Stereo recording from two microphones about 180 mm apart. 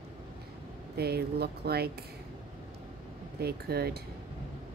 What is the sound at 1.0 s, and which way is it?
Speech, 60° right (ahead or behind).